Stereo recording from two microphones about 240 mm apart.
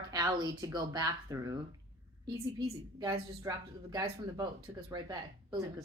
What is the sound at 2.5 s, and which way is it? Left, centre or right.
Speech, centre.